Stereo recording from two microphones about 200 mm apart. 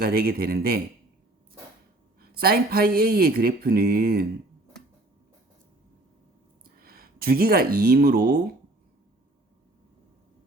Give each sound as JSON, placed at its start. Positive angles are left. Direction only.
{"t": 0.0, "sound": "speech", "side_deg": -50}
{"t": 2.3, "sound": "speech", "side_deg": -50}
{"t": 6.7, "sound": "speech", "side_deg": -50}